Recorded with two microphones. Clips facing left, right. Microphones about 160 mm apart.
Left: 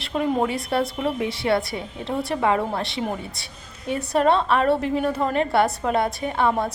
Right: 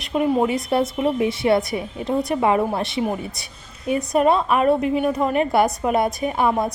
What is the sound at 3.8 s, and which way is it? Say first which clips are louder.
A woman's voice: right 2 dB; 10° right (ahead or behind).